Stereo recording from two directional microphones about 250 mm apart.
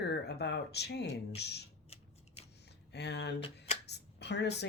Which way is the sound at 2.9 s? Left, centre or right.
Left.